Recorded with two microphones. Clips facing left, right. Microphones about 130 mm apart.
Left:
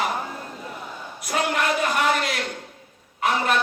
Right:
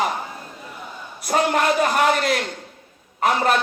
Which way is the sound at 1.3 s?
35° right (ahead or behind).